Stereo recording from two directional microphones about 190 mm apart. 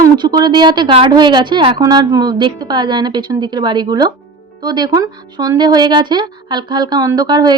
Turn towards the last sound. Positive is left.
turn(degrees=-20)  # may be behind; listen again after turning